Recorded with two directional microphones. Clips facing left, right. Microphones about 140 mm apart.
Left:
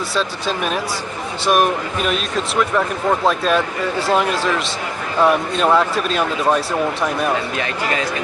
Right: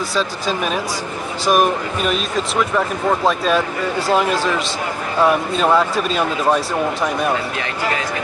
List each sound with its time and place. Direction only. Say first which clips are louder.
0.1 s speech: right 1 dB; centre (ahead or behind)